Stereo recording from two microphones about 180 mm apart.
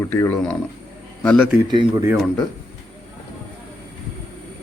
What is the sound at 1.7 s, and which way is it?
Speech, 15° right (ahead or behind).